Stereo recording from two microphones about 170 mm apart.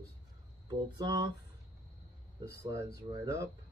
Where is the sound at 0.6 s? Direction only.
25° right (ahead or behind).